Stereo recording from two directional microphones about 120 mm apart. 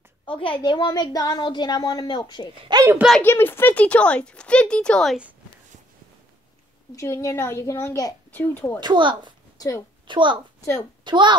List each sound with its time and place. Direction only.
0.2 s a woman's voice: 45° left (ahead or behind)
2.7 s a child's voice: 25° right (ahead or behind)
3.2 s speech: 15° left (ahead or behind)
7.0 s a child's voice: 25° left (ahead or behind)
8.7 s speech: 40° right (ahead or behind)
9.6 s a woman's voice: 30° left (ahead or behind)
10.0 s speech: 40° right (ahead or behind)